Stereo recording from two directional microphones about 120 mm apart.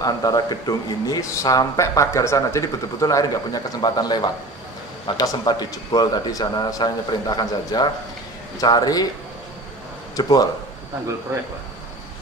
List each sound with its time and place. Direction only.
0.0 s speech: 35° left (ahead or behind)
10.1 s speech: 35° left (ahead or behind)
11.3 s speech: 25° right (ahead or behind)